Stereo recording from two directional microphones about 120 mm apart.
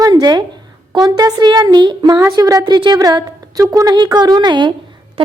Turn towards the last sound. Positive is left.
turn(degrees=-40)  # may be behind; listen again after turning